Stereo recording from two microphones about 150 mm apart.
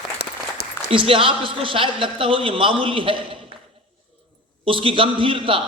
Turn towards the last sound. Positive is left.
turn(degrees=-35)  # may be behind; listen again after turning